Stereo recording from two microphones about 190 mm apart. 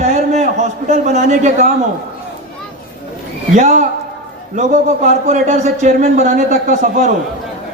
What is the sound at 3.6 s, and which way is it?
Speech, 40° right (ahead or behind).